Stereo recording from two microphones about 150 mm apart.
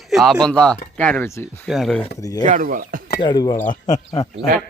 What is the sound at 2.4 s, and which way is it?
Speech, 60° right (ahead or behind).